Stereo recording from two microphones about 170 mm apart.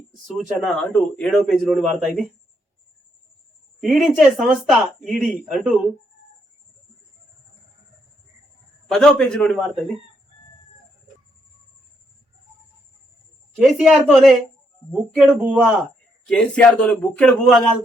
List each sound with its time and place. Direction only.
0.3 s speech: centre (ahead or behind)
3.8 s speech: centre (ahead or behind)
8.9 s speech: 5° left (ahead or behind)
13.7 s speech: centre (ahead or behind)
15.4 s speech: 5° right (ahead or behind)
16.2 s a man's voice: 5° left (ahead or behind)